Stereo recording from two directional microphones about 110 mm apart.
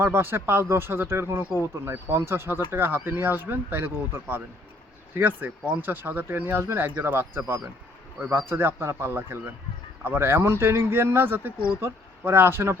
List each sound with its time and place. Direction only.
0.0 s speech: 20° right (ahead or behind)